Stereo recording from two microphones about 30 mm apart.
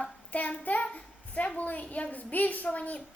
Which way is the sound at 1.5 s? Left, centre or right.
Left.